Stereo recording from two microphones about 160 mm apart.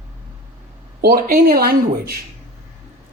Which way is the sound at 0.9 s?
70° right (ahead or behind).